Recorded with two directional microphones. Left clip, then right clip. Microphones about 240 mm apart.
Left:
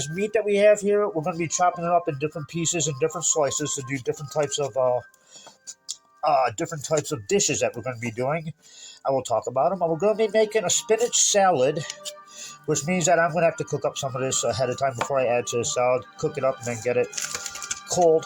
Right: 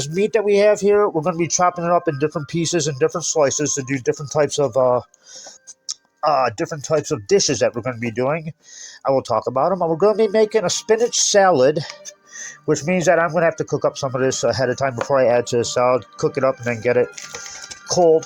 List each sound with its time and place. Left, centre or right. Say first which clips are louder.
0.1 s speech: right 7 dB; right
6.2 s speech: right 4 dB; right